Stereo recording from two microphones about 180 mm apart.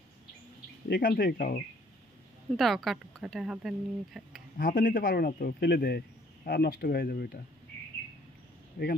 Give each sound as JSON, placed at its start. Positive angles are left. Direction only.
{"t": 1.0, "sound": "speech", "side_deg": 55}
{"t": 2.5, "sound": "speech", "side_deg": 0}
{"t": 4.6, "sound": "speech", "side_deg": 50}
{"t": 8.8, "sound": "speech", "side_deg": 50}